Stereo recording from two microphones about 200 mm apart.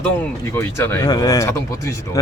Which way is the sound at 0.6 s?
10° left (ahead or behind).